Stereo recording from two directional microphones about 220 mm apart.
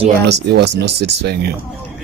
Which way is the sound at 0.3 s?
50° right (ahead or behind).